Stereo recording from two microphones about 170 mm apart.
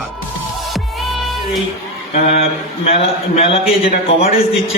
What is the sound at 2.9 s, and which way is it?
A man's voice, 35° left (ahead or behind).